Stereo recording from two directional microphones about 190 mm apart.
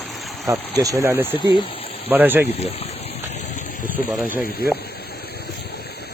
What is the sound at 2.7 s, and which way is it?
Gush, 30° left (ahead or behind).